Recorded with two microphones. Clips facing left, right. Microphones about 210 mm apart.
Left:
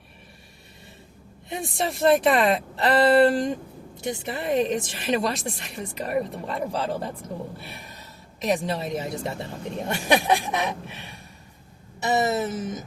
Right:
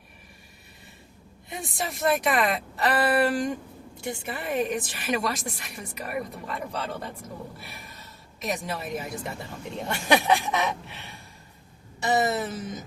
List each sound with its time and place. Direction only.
1.5 s a woman's voice: 25° left (ahead or behind)
8.4 s a woman's voice: 30° left (ahead or behind)
10.0 s a sound: 15° left (ahead or behind)
12.0 s a woman's voice: 20° left (ahead or behind)